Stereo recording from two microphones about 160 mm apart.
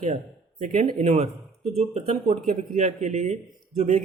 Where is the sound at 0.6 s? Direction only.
45° right (ahead or behind).